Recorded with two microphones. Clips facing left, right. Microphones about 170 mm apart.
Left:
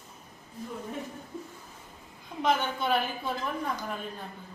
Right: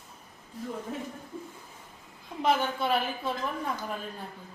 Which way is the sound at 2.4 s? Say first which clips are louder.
Right 1 dB; 5° right (ahead or behind).